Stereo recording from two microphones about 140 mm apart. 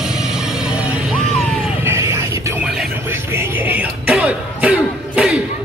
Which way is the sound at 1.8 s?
20° right (ahead or behind).